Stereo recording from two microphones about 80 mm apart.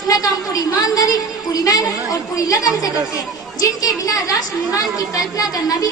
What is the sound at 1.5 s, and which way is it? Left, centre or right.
A woman's voice, left.